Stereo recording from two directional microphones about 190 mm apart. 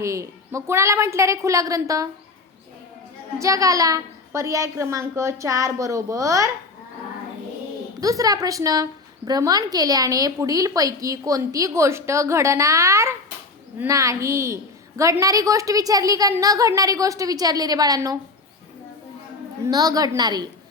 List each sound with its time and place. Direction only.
0.0 s a woman's voice: 15° right (ahead or behind)
3.3 s a woman's voice: 15° right (ahead or behind)
8.0 s a woman's voice: 20° right (ahead or behind)
19.6 s a woman's voice: 20° right (ahead or behind)